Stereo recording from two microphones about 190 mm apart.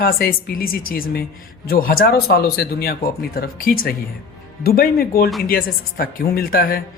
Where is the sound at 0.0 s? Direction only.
50° left (ahead or behind).